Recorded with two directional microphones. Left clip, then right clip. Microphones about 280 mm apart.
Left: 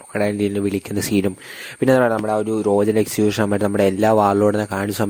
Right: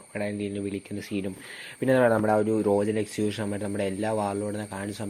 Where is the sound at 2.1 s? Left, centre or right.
Centre; by 5.0 s left.